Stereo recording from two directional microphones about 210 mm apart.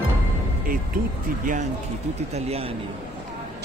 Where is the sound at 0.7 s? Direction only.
40° right (ahead or behind).